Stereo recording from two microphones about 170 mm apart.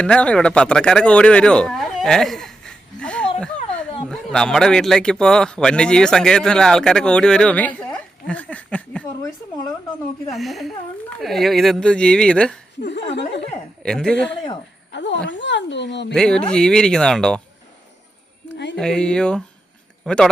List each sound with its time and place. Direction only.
0.0 s speech: 5° left (ahead or behind)
10.3 s speech: centre (ahead or behind)
12.8 s speech: 90° left
13.8 s speech: 5° left (ahead or behind)
14.9 s speech: 90° left
16.1 s speech: 5° left (ahead or behind)
18.5 s speech: 90° left
18.8 s speech: 5° left (ahead or behind)